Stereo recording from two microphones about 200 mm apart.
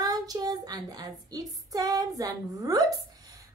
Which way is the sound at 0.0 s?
20° right (ahead or behind).